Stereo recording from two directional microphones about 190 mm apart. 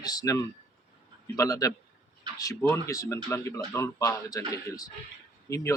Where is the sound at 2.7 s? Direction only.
15° left (ahead or behind).